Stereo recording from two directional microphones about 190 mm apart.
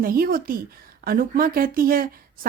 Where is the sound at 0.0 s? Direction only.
50° right (ahead or behind).